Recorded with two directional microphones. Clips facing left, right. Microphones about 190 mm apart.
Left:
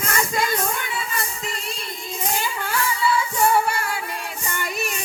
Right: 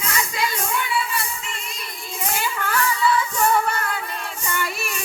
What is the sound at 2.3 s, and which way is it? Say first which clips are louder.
Music: right 3 dB; 15° left (ahead or behind).